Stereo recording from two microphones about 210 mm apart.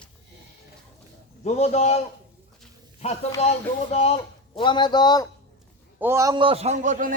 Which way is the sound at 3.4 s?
30° left (ahead or behind).